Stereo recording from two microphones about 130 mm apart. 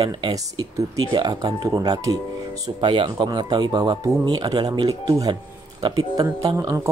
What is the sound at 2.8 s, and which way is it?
A man's voice, 40° right (ahead or behind).